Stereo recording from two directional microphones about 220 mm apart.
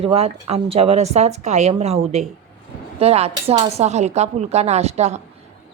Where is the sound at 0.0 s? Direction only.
30° right (ahead or behind).